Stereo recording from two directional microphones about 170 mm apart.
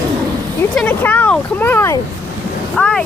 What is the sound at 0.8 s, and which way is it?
Speech, 10° left (ahead or behind).